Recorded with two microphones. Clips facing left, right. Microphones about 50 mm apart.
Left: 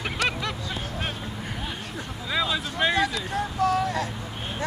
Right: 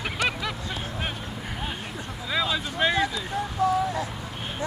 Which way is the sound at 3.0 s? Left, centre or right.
Centre.